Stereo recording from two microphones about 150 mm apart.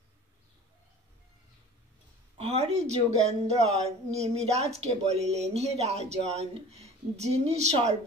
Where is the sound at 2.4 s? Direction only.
45° right (ahead or behind).